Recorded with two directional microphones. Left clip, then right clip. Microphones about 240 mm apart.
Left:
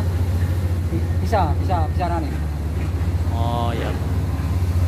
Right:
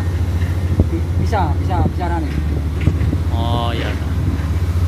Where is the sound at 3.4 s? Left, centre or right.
Centre.